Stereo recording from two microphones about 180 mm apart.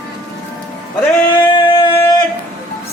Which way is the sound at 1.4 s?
25° left (ahead or behind).